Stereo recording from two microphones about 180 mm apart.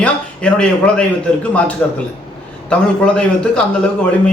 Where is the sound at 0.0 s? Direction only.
5° left (ahead or behind).